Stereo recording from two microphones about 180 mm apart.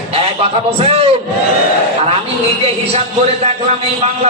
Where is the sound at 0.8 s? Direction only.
35° right (ahead or behind).